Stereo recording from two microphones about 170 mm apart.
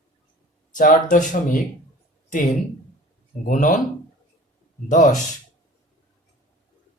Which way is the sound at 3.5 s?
50° left (ahead or behind).